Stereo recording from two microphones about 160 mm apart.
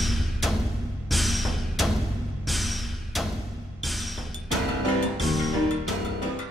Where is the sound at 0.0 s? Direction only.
Centre (ahead or behind).